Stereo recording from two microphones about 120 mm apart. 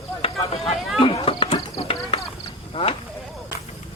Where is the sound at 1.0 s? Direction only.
50° left (ahead or behind).